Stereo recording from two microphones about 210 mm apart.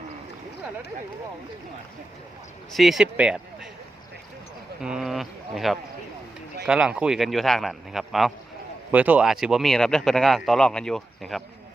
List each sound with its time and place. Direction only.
2.7 s speech: centre (ahead or behind)
4.8 s speech: centre (ahead or behind)